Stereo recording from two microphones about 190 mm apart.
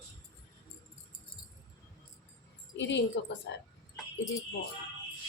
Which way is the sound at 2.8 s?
70° left (ahead or behind).